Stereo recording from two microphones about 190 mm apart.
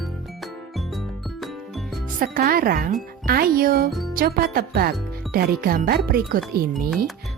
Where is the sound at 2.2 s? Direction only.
50° right (ahead or behind).